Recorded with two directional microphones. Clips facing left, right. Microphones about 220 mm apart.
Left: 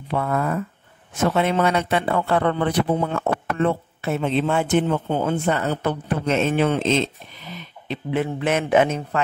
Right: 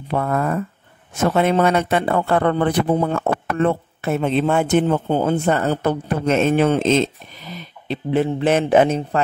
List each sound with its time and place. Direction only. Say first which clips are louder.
0.1 s speech: right 2 dB; 45° right (ahead or behind)
4.8 s speech: right 4 dB; 35° right (ahead or behind)